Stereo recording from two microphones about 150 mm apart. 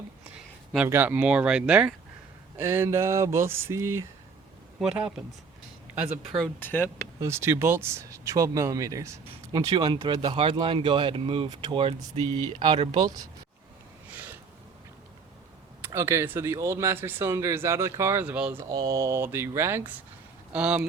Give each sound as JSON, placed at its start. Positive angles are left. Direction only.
{"t": 0.9, "sound": "speech", "side_deg": -15}
{"t": 4.8, "sound": "speech", "side_deg": -5}
{"t": 6.6, "sound": "speech", "side_deg": 15}
{"t": 7.2, "sound": "speech", "side_deg": -15}
{"t": 14.1, "sound": "a sound", "side_deg": -10}
{"t": 15.8, "sound": "speech", "side_deg": -20}
{"t": 18.7, "sound": "speech", "side_deg": -25}